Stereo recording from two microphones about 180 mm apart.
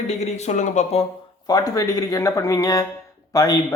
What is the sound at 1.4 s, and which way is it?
Speech, 20° left (ahead or behind).